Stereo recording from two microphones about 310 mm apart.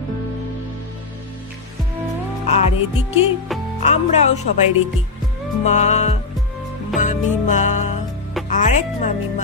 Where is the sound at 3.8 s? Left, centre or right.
Left.